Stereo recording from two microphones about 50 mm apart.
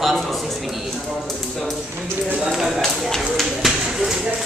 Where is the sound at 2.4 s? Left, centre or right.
Centre.